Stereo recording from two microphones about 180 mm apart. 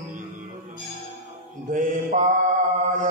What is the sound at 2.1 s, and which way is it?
Mantra, 45° right (ahead or behind).